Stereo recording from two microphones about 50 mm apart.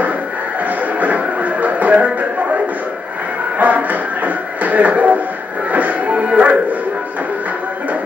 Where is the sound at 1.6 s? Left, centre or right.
Right.